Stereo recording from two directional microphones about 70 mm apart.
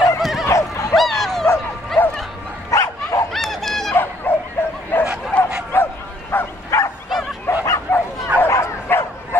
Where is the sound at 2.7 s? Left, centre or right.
Left.